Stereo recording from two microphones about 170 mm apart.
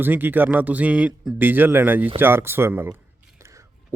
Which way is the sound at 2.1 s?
15° right (ahead or behind).